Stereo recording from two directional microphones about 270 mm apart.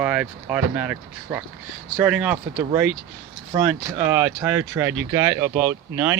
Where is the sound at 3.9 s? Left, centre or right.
Centre.